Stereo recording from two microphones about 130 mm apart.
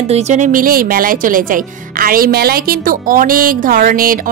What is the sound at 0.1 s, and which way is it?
A woman's voice, 60° right (ahead or behind).